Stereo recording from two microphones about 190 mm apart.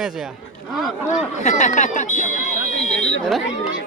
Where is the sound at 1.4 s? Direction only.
40° left (ahead or behind).